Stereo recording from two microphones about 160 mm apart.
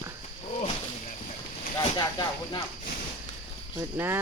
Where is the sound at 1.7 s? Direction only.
25° left (ahead or behind).